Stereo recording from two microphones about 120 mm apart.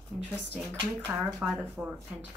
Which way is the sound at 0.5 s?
15° right (ahead or behind).